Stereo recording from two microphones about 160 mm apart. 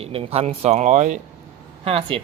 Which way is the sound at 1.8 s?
35° right (ahead or behind).